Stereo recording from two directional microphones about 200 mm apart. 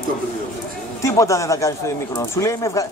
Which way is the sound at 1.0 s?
15° left (ahead or behind).